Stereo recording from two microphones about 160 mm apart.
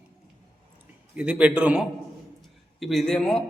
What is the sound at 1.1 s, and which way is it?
A man's voice, 10° right (ahead or behind).